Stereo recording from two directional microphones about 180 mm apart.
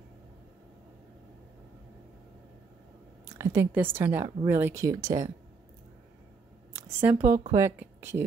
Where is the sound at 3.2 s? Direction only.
15° right (ahead or behind).